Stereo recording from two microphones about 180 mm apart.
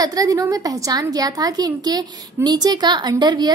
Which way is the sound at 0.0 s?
20° right (ahead or behind).